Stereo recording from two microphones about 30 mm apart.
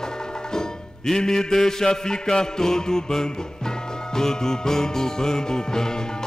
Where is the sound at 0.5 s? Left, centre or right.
Centre.